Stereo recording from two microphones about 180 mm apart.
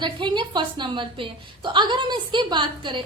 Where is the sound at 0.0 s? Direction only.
25° right (ahead or behind).